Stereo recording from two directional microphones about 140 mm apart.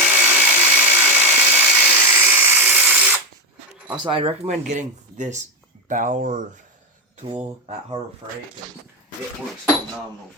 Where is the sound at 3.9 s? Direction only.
35° right (ahead or behind); by 6.5 s 70° right (ahead or behind).